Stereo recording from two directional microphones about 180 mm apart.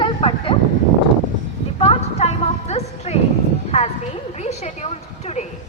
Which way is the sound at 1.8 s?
35° left (ahead or behind).